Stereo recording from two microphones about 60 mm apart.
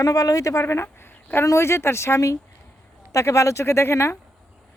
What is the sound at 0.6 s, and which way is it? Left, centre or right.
Speech, left.